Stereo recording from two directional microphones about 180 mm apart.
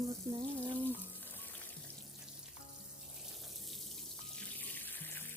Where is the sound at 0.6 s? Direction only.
10° left (ahead or behind).